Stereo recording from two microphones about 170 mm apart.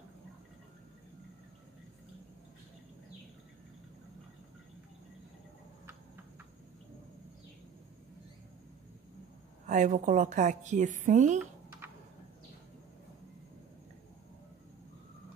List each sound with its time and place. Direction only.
9.7 s a woman's voice: 50° right (ahead or behind)